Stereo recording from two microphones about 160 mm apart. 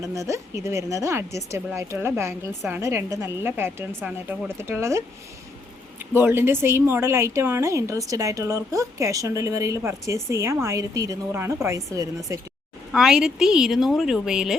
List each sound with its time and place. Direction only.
0.0 s speech: 20° right (ahead or behind)
12.9 s a woman's voice: 5° right (ahead or behind)